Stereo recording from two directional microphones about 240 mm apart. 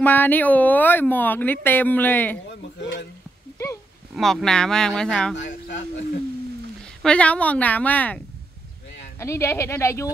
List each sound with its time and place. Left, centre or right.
0.0 s speech: centre
4.1 s a woman's voice: centre
5.3 s speech: left
7.0 s a woman's voice: centre
9.2 s speech: centre